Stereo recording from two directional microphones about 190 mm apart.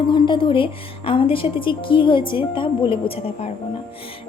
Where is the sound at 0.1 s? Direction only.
25° left (ahead or behind).